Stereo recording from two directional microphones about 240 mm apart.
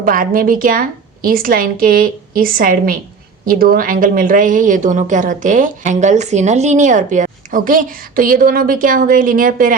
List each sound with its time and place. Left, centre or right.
0.0 s speech: right